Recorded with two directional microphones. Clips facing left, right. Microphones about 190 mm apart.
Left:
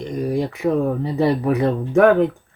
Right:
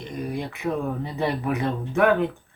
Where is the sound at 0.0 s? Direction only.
40° left (ahead or behind).